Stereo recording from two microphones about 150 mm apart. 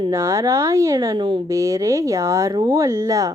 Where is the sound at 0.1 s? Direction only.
20° right (ahead or behind).